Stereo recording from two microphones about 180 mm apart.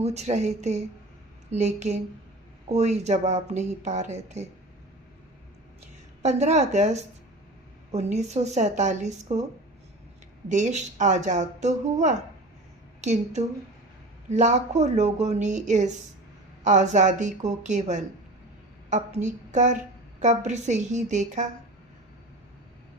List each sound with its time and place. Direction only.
0.0 s speech: 40° right (ahead or behind)
6.2 s speech: 40° right (ahead or behind)
10.5 s a woman's voice: 40° right (ahead or behind)